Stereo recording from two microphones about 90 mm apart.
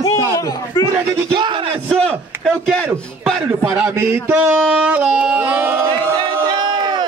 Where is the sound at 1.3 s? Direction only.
60° right (ahead or behind).